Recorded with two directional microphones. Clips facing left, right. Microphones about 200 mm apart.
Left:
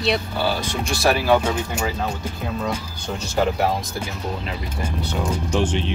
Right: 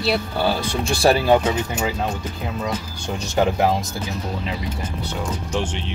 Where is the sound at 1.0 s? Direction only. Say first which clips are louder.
Right 2 dB; 25° right (ahead or behind).